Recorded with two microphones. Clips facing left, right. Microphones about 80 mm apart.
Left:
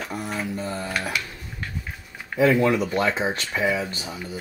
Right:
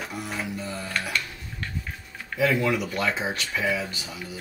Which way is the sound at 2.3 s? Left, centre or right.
Left.